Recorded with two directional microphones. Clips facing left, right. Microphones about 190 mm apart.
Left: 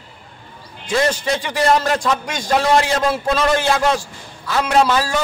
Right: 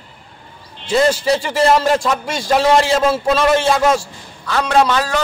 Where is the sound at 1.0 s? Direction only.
30° right (ahead or behind).